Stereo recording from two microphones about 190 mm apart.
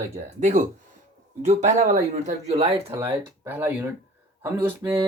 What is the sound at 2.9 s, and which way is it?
Speech, 15° right (ahead or behind).